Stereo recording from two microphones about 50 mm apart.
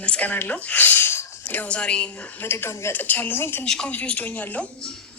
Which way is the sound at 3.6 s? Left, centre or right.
Centre.